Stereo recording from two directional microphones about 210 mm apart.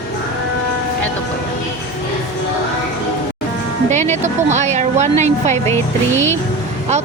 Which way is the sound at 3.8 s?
35° right (ahead or behind).